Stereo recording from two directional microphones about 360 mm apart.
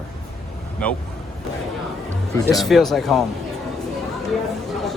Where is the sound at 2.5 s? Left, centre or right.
Centre.